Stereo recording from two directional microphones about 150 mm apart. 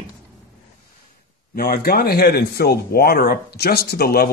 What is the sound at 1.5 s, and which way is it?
Speech, 75° left (ahead or behind).